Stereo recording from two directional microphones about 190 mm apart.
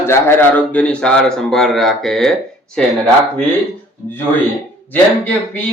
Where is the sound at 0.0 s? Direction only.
10° left (ahead or behind).